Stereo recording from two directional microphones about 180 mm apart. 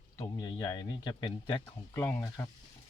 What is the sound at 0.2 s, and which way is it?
Speech, 20° left (ahead or behind).